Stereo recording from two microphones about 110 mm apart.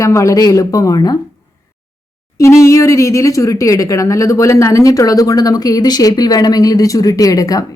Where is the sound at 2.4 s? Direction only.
30° left (ahead or behind).